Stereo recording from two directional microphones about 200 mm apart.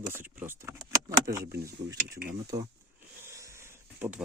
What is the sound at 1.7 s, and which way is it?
Speech, 60° right (ahead or behind).